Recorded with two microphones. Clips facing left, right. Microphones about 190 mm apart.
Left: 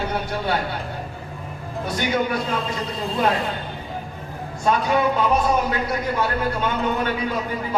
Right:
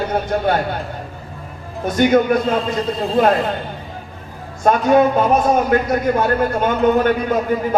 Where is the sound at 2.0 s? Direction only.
50° right (ahead or behind).